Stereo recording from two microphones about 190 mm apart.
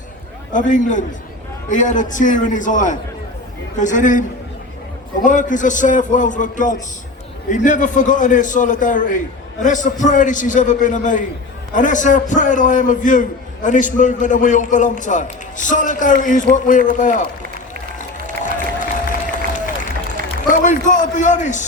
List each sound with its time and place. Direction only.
0.5 s a man's voice: 40° left (ahead or behind)
5.2 s a man's voice: 40° left (ahead or behind)
18.5 s applause: 45° left (ahead or behind)
20.5 s a man's voice: 40° left (ahead or behind)